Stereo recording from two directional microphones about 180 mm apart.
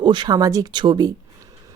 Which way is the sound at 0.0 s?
25° right (ahead or behind).